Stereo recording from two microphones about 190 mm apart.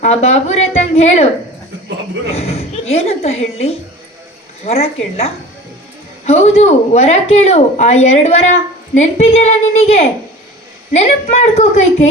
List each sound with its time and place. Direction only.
0.0 s a woman's voice: 35° left (ahead or behind)
2.3 s speech: 35° left (ahead or behind)